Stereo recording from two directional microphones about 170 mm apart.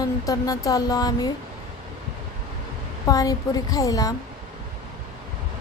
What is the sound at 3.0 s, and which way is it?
Music, 20° left (ahead or behind).